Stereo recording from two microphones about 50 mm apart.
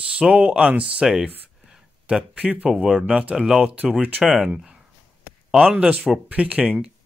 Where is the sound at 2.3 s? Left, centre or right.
Right.